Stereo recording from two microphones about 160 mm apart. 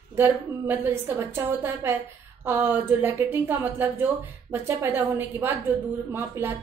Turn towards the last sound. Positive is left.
turn(degrees=-15)  # may be behind; listen again after turning